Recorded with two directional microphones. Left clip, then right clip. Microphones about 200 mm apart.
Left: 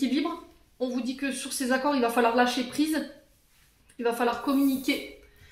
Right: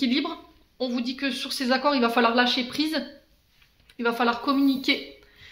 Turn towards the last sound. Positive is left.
turn(degrees=-35)  # may be behind; listen again after turning